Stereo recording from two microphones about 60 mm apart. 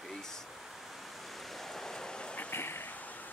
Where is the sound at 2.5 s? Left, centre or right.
Left.